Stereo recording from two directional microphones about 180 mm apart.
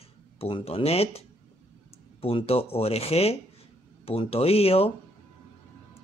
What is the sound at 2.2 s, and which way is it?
Speech, 30° left (ahead or behind).